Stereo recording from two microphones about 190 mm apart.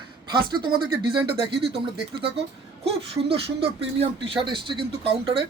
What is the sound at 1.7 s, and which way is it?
Speech, 30° right (ahead or behind).